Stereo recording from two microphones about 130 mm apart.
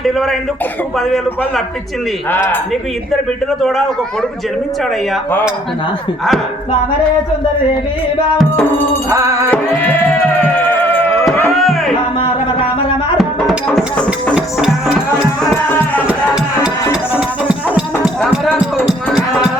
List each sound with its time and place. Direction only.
0.0 s a man's voice: centre (ahead or behind)
2.3 s speech: 15° left (ahead or behind)
3.6 s a man's voice: centre (ahead or behind)
9.0 s music: 25° right (ahead or behind)
10.5 s music: 15° left (ahead or behind)
11.5 s music: centre (ahead or behind)
13.7 s a sound: 10° left (ahead or behind)
14.3 s music: 5° right (ahead or behind)
15.7 s music: 15° left (ahead or behind)
16.0 s music: 5° right (ahead or behind)